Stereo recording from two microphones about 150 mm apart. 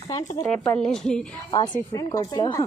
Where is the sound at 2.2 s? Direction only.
30° left (ahead or behind).